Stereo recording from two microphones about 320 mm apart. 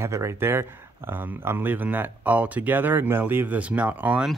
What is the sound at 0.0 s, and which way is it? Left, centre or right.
Speech, centre.